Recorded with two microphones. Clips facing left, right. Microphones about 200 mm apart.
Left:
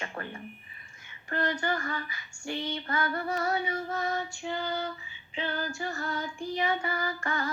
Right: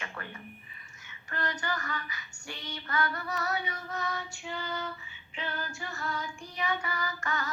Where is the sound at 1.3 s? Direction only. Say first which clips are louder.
Left 5 dB; 30° left (ahead or behind).